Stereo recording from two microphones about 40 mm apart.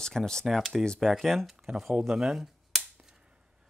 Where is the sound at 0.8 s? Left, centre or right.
Centre.